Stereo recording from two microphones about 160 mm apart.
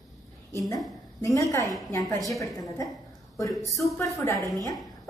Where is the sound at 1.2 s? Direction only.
20° left (ahead or behind).